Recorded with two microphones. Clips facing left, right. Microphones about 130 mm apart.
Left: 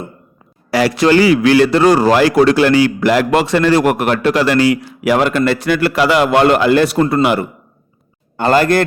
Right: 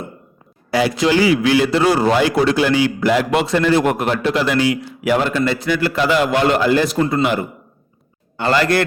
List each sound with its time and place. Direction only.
0.7 s a man's voice: 80° left
5.5 s a man's voice: 65° left (ahead or behind)
8.4 s a man's voice: 50° left (ahead or behind)